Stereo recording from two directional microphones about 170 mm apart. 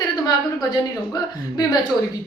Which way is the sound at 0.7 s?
20° left (ahead or behind).